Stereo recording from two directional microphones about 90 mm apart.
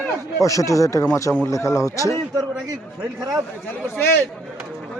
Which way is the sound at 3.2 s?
45° right (ahead or behind).